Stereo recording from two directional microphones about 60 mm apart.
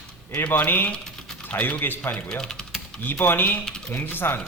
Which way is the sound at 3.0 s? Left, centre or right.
Left.